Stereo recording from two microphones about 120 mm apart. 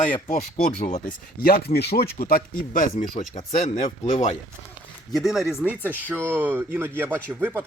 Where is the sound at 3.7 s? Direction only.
90° left.